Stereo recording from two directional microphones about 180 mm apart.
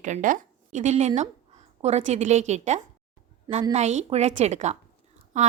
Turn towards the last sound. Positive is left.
turn(degrees=-40)  # may be behind; listen again after turning